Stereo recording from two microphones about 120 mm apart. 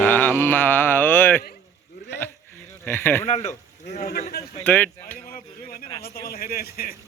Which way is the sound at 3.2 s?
85° left.